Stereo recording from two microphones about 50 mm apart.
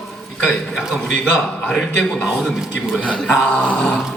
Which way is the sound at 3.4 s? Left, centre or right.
Left.